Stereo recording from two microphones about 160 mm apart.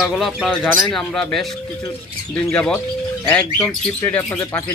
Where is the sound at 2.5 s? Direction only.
5° left (ahead or behind).